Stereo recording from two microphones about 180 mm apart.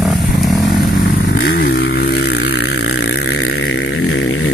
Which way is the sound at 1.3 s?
65° left (ahead or behind).